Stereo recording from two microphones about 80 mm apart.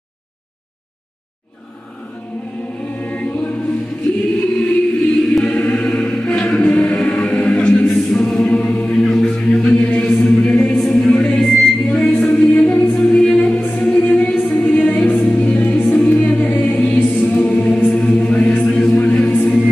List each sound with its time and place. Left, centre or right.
3.0 s choir: centre
5.1 s choir: centre
6.6 s music: centre
7.8 s choir: centre
9.8 s chant: centre
10.1 s music: centre
12.8 s music: centre; by 15.0 s left
15.0 s choir: centre
18.2 s chant: centre
19.3 s a capella: centre